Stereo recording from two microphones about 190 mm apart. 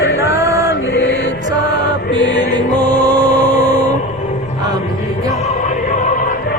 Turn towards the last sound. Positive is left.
turn(degrees=45)  # may be behind; listen again after turning